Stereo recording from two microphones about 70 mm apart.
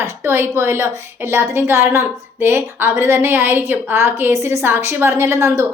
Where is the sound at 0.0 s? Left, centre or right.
Right.